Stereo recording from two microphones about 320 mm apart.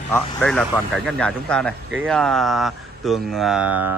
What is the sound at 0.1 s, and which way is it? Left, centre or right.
Speech, centre.